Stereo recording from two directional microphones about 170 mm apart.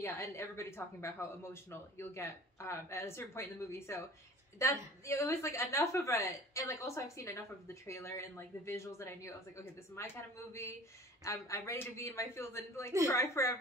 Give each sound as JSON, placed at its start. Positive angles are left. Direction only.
{"t": 0.0, "sound": "a woman's voice", "side_deg": 15}